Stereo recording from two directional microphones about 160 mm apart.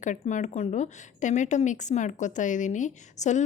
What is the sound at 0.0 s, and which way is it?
A woman's voice, 50° left (ahead or behind).